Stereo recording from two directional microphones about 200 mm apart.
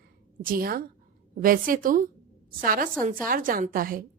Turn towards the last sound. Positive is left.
turn(degrees=-45)  # may be behind; listen again after turning